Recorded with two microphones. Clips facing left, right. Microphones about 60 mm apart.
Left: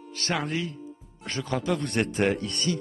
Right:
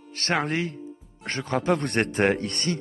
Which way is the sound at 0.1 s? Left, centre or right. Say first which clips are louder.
Right 3 dB; right.